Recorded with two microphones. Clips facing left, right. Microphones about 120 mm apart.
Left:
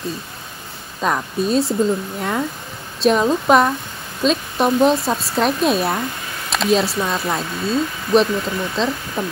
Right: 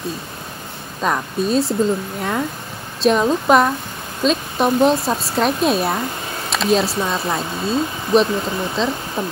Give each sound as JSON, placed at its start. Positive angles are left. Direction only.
{"t": 1.0, "sound": "speech", "side_deg": 0}
{"t": 8.3, "sound": "speech", "side_deg": -25}